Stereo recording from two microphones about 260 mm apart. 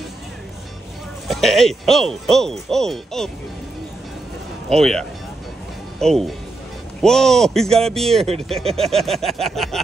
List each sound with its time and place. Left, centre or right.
1.3 s speech: centre
4.6 s speech: centre